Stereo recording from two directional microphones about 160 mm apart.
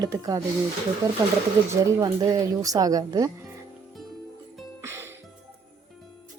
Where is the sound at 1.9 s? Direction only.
20° right (ahead or behind).